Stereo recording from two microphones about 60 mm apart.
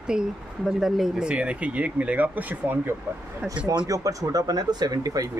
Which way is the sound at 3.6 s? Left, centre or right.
Right.